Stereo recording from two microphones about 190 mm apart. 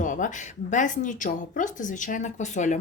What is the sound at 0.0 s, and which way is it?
A woman's voice, 40° left (ahead or behind).